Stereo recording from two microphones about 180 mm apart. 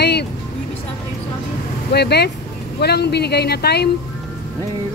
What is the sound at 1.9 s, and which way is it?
Speech, 65° left (ahead or behind).